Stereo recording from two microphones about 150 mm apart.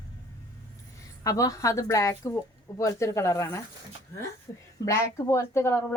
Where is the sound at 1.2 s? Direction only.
20° left (ahead or behind).